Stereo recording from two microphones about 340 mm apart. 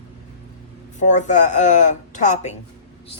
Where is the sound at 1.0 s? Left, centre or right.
Left.